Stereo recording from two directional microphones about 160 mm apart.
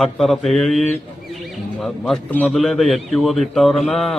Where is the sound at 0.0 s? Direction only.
Centre (ahead or behind).